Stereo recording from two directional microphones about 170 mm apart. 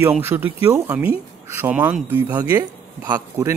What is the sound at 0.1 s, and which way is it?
Speech, 10° right (ahead or behind).